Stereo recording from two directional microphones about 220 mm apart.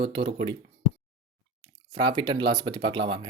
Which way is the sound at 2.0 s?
20° right (ahead or behind).